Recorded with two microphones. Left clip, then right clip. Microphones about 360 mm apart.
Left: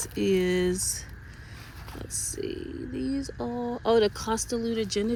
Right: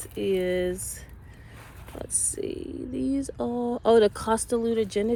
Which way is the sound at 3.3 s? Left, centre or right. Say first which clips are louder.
Right 3 dB; right.